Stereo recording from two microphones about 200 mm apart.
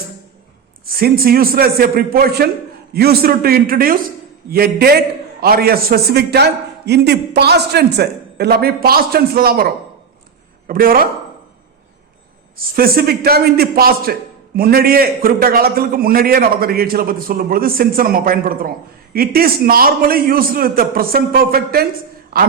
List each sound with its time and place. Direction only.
0.9 s a man's voice: 50° right (ahead or behind)
10.7 s a man's voice: 45° right (ahead or behind)
12.5 s a man's voice: 50° right (ahead or behind)